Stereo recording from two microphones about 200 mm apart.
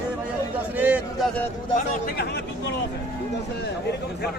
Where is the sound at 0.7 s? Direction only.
10° right (ahead or behind).